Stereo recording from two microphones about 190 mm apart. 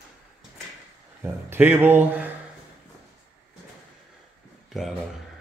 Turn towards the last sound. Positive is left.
turn(degrees=0)  # may be behind; listen again after turning